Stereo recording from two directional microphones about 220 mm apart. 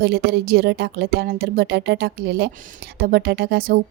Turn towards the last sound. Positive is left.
turn(degrees=-45)  # may be behind; listen again after turning